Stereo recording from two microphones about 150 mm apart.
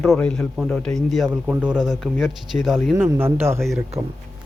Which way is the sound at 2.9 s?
15° right (ahead or behind).